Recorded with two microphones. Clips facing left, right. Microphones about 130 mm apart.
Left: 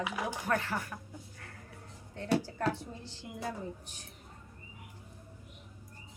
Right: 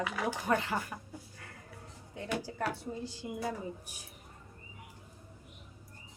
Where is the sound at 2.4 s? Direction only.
10° right (ahead or behind).